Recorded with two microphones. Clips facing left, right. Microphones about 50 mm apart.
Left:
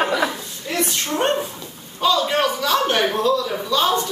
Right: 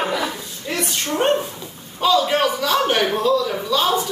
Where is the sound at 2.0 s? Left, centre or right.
Centre.